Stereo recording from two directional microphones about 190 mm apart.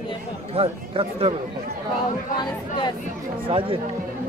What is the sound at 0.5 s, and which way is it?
Speech, 30° right (ahead or behind).